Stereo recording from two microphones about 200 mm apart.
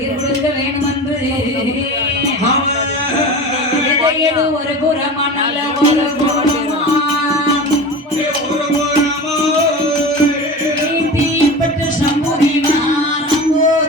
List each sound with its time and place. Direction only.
5.8 s music: 35° right (ahead or behind)